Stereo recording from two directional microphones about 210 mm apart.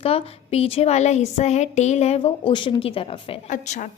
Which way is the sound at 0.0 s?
25° left (ahead or behind).